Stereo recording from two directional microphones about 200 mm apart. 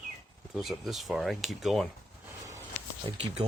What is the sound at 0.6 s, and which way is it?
Speech, centre (ahead or behind).